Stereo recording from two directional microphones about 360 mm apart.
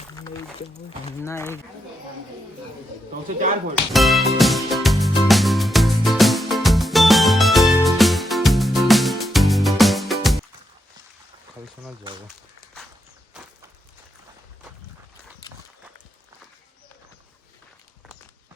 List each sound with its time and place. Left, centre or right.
0.1 s a sound: centre
1.0 s speech: centre
3.9 s speech: centre
4.4 s music: centre
11.6 s speech: centre
15.4 s horse: centre